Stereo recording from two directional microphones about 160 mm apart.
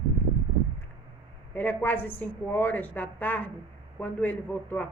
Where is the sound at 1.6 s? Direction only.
10° left (ahead or behind).